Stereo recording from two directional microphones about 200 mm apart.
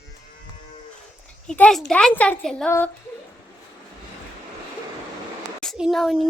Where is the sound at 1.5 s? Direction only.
5° left (ahead or behind).